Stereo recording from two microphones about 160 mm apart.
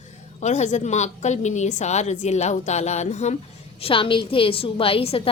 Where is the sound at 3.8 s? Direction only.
35° left (ahead or behind).